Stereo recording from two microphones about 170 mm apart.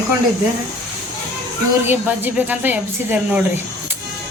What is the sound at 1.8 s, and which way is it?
Speech, 10° right (ahead or behind).